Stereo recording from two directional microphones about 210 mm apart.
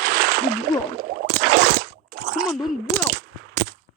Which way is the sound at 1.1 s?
55° right (ahead or behind).